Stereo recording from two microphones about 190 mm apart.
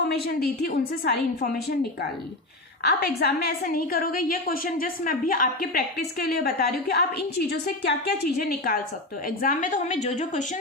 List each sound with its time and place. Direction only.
0.3 s a woman's voice: 55° left (ahead or behind)
2.8 s a woman's voice: 60° left (ahead or behind); by 10.4 s 40° left (ahead or behind)